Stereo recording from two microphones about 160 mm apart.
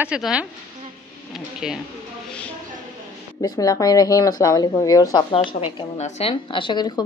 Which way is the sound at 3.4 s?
25° left (ahead or behind).